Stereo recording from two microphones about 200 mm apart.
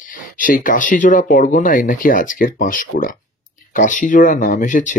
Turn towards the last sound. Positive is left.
turn(degrees=40)  # may be behind; listen again after turning